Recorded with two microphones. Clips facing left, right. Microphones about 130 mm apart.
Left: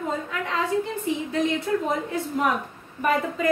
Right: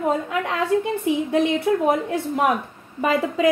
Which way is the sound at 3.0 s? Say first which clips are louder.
Right 4 dB; 90° right.